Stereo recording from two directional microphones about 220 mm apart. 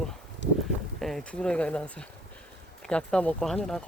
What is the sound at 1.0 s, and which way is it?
Speech, centre (ahead or behind).